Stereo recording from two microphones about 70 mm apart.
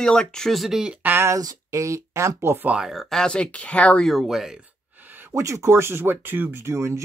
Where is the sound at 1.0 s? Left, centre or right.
Right.